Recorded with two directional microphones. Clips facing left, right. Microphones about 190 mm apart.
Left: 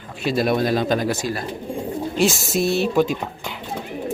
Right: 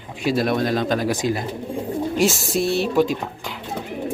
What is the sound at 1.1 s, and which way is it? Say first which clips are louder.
Speech: right 2 dB; 20° right (ahead or behind).